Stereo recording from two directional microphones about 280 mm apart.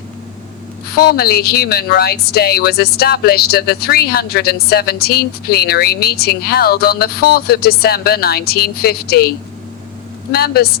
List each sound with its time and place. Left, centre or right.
0.9 s speech: left
10.3 s speech: left